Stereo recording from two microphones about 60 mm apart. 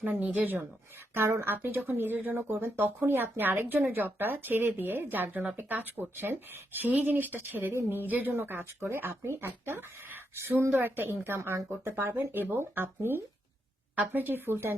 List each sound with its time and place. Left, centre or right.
0.0 s speech: right
1.1 s speech: right
8.8 s speech: right
13.9 s speech: right